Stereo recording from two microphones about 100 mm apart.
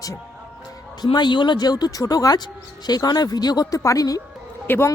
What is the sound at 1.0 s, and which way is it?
Speech, 45° left (ahead or behind).